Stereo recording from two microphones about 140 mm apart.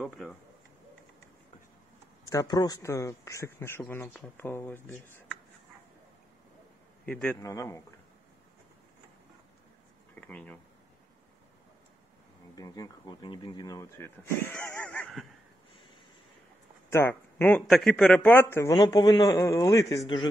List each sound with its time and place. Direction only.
2.2 s speech: 25° left (ahead or behind)
7.1 s a man's voice: 5° left (ahead or behind)
7.4 s speech: 25° left (ahead or behind)
10.1 s a sound: 10° left (ahead or behind)
12.5 s speech: 25° left (ahead or behind); by 15.2 s 10° left (ahead or behind)
16.9 s speech: 15° left (ahead or behind)
17.6 s speech: centre (ahead or behind); by 20.0 s 25° left (ahead or behind)